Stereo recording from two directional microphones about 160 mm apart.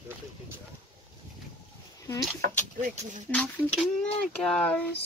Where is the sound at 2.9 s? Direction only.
45° right (ahead or behind).